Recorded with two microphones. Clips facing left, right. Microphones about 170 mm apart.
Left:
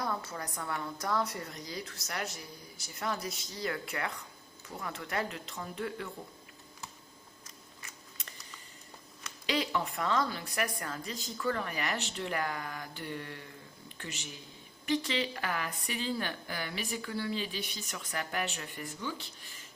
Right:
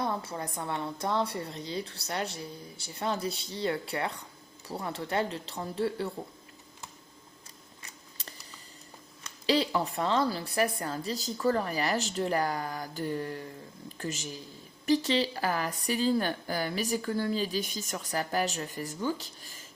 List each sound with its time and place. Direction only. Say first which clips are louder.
0.0 s a woman's voice: right 4 dB; 25° right (ahead or behind)
8.2 s a sound: right 6 dB; 35° right (ahead or behind)
9.5 s a woman's voice: right 5 dB; 35° right (ahead or behind)